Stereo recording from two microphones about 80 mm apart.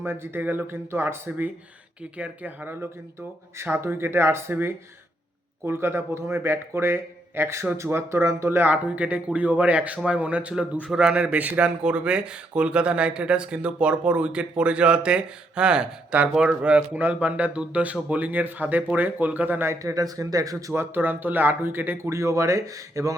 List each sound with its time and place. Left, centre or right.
0.0 s speech: right
2.1 s speech: centre
19.8 s speech: right
20.9 s speech: right
22.1 s speech: right